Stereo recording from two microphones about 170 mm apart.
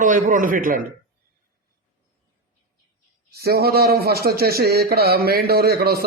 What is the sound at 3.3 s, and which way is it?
A man's voice, 65° right (ahead or behind).